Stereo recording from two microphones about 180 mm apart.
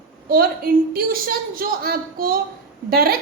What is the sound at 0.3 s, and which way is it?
A woman's voice, 55° right (ahead or behind).